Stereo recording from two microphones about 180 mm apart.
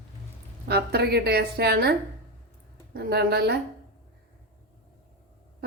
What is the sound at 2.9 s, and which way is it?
Speech, 65° right (ahead or behind).